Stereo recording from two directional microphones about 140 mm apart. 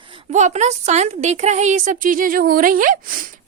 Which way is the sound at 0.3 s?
55° right (ahead or behind).